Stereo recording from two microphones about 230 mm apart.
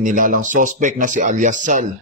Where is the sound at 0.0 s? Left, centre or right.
Right.